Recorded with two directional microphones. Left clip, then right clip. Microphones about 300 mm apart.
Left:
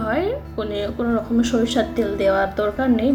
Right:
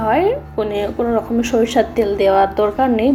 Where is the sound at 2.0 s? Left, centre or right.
Right.